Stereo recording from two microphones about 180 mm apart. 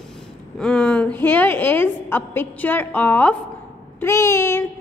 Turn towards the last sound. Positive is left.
turn(degrees=15)  # may be behind; listen again after turning